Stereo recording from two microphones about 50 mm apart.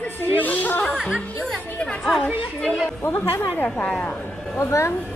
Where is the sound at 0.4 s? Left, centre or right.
Left.